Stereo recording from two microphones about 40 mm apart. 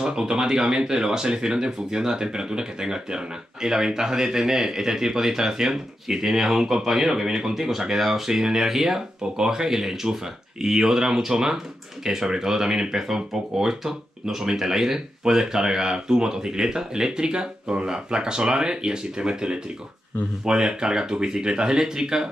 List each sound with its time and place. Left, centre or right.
0.0 s speech: centre